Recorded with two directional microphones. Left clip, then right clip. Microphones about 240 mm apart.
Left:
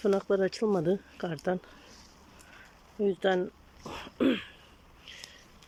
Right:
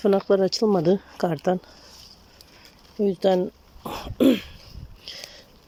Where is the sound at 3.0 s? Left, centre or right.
Centre.